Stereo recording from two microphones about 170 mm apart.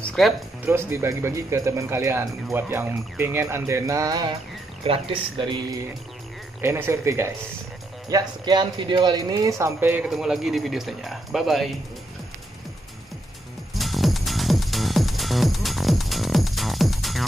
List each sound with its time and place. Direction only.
0.0 s music: 5° left (ahead or behind)
0.7 s speech: 15° right (ahead or behind)
6.6 s speech: 15° right (ahead or behind)
8.1 s speech: 25° right (ahead or behind); by 11.7 s centre (ahead or behind)
13.7 s music: centre (ahead or behind)